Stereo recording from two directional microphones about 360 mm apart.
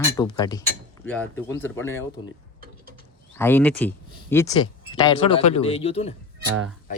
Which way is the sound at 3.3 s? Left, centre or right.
Centre.